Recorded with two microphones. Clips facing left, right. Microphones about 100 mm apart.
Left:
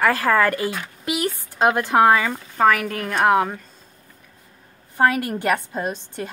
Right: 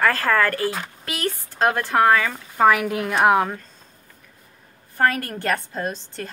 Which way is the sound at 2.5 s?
5° right (ahead or behind).